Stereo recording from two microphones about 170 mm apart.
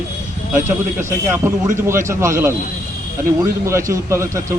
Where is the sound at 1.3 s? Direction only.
15° right (ahead or behind).